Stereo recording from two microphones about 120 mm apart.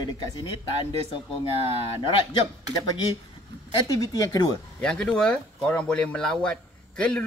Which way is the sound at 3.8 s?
30° left (ahead or behind).